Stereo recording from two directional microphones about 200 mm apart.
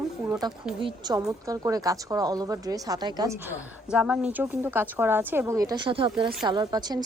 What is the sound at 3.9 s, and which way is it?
A woman's voice, 5° right (ahead or behind).